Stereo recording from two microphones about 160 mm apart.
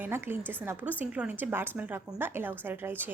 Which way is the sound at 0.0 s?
15° right (ahead or behind).